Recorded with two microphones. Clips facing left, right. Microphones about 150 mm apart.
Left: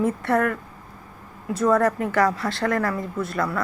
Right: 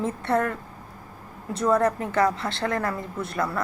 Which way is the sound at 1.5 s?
25° right (ahead or behind).